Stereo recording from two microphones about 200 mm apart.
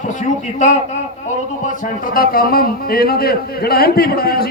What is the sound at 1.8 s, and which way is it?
Speech, 45° left (ahead or behind).